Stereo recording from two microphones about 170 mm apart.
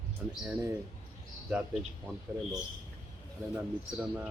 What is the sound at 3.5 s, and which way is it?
Speech, 10° right (ahead or behind).